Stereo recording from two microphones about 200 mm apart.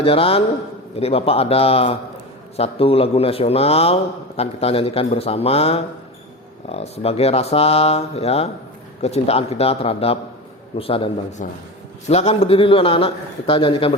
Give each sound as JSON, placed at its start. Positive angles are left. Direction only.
{"t": 0.0, "sound": "a man's voice", "side_deg": 30}